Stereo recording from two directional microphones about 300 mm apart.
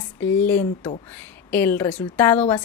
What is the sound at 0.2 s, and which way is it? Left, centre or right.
A woman's voice, centre.